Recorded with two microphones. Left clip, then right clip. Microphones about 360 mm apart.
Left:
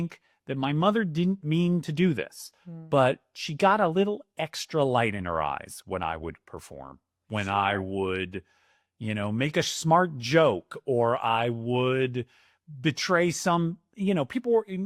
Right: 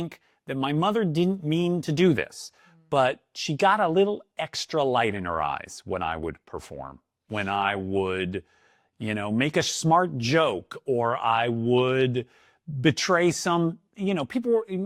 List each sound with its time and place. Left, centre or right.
0.4 s speech: right
12.8 s speech: right
14.2 s speech: right